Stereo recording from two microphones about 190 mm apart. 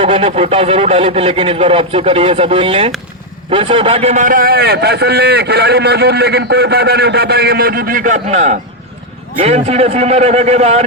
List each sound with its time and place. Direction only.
0.0 s a man's voice: 30° right (ahead or behind)